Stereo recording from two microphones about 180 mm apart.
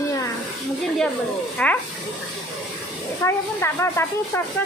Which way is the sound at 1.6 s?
5° left (ahead or behind).